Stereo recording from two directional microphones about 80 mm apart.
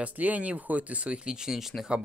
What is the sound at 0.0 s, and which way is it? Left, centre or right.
Speech, centre.